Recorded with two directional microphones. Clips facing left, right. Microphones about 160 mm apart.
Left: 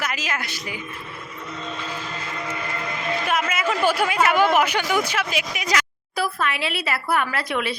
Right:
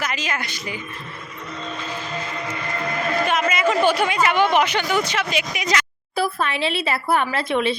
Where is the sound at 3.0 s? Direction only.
50° right (ahead or behind).